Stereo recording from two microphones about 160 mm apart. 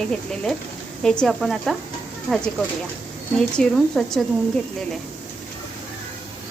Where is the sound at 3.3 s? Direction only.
5° left (ahead or behind).